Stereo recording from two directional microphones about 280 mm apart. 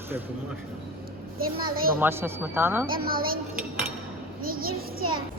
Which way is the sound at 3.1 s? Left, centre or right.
Right.